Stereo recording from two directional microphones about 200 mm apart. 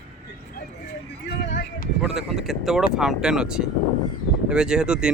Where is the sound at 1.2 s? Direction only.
60° left (ahead or behind).